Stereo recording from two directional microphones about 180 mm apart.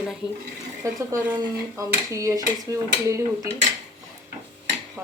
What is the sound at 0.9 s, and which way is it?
Speech, 20° right (ahead or behind).